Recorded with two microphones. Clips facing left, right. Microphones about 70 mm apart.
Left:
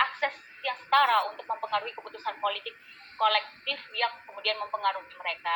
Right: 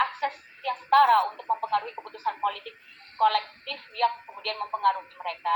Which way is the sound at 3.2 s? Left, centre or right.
Left.